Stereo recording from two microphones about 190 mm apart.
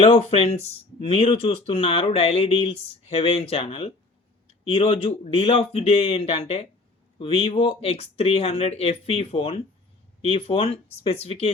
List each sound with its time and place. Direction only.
0.0 s speech: 35° left (ahead or behind)